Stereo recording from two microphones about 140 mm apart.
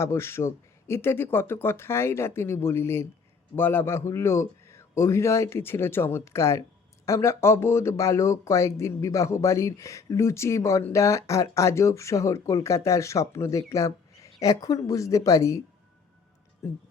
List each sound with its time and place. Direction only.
0.0 s a man's voice: 20° left (ahead or behind)